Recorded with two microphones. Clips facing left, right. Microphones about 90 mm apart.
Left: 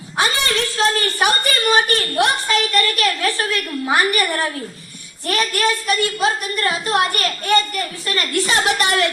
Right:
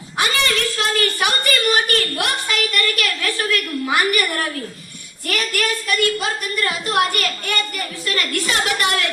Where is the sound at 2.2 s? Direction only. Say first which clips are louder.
Left 5 dB; 35° left (ahead or behind).